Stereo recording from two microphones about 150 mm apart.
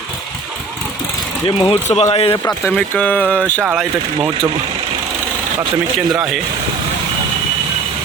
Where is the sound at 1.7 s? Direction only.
45° left (ahead or behind).